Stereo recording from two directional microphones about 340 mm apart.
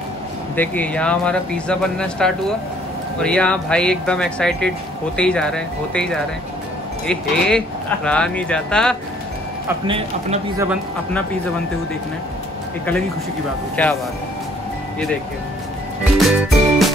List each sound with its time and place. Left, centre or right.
0.6 s speech: centre
9.8 s speech: centre
13.8 s speech: centre
16.2 s music: centre